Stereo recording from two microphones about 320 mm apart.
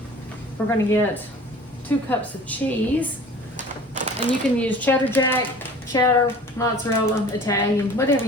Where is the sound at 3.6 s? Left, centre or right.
Right.